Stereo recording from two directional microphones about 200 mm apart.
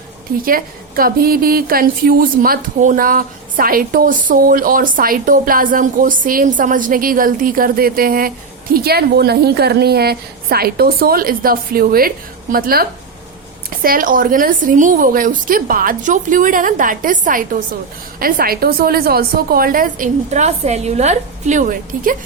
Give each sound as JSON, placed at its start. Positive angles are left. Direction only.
{"t": 0.4, "sound": "a woman's voice", "side_deg": -45}